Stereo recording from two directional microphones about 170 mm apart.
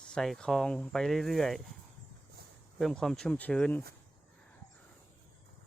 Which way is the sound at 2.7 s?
Centre (ahead or behind).